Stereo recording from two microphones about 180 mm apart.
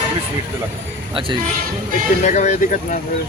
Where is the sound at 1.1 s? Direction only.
30° right (ahead or behind).